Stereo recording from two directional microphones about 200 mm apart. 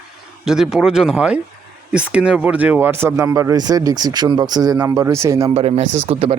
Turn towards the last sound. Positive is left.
turn(degrees=-25)  # may be behind; listen again after turning